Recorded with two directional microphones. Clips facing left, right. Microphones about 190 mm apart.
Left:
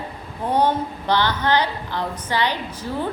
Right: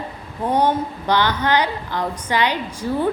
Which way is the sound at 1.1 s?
15° right (ahead or behind).